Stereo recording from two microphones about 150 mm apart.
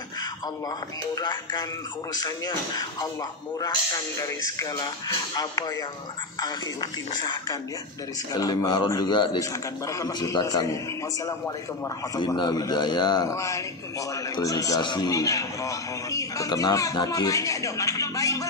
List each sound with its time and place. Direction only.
1.1 s a man's voice: 30° left (ahead or behind)
12.2 s a man's voice: 30° left (ahead or behind)